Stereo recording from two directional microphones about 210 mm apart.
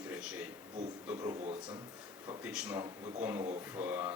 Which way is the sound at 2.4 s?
5° right (ahead or behind).